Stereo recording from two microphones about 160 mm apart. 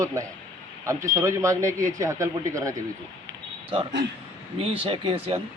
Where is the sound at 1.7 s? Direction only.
50° right (ahead or behind).